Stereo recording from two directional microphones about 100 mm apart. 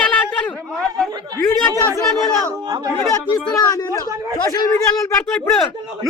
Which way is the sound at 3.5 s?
35° left (ahead or behind).